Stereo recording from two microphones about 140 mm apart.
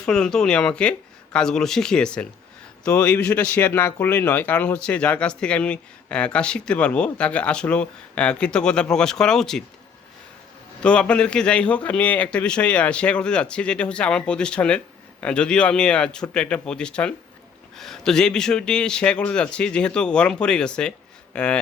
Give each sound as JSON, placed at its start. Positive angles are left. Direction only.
{"t": 0.0, "sound": "speech", "side_deg": 5}
{"t": 10.8, "sound": "speech", "side_deg": 10}